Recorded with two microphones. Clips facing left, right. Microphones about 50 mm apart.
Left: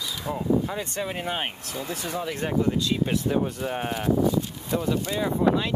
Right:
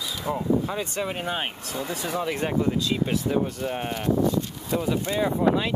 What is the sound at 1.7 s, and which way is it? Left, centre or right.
Speech, right.